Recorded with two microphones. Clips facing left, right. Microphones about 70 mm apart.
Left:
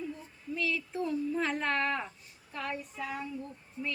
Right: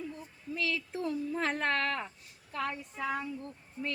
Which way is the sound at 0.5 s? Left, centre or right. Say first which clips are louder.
Left 1 dB; right.